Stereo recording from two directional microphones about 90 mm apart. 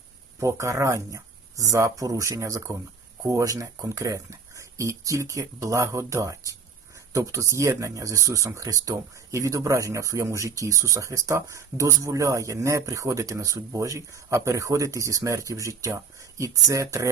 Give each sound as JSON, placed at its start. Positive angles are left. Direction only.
{"t": 0.3, "sound": "speech", "side_deg": -35}